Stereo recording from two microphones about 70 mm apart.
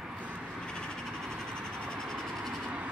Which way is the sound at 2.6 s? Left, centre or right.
Centre.